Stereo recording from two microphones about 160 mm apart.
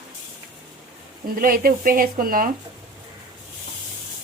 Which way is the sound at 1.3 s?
60° right (ahead or behind).